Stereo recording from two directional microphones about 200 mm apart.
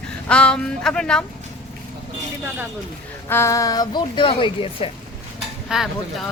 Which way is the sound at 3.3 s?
15° left (ahead or behind).